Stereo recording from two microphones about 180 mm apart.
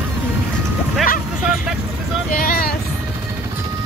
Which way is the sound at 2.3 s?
55° left (ahead or behind).